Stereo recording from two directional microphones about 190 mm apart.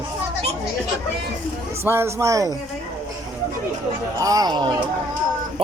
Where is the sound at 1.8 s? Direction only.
15° right (ahead or behind).